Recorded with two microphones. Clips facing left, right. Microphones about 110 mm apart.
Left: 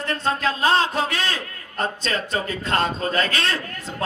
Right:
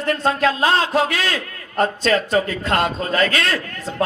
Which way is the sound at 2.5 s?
30° left (ahead or behind).